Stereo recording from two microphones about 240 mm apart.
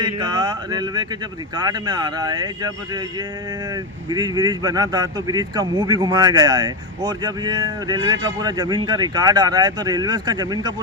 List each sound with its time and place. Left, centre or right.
0.0 s speech: centre